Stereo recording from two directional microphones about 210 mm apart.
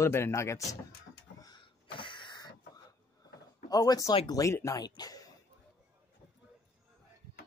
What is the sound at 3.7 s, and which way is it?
Speech, 20° left (ahead or behind).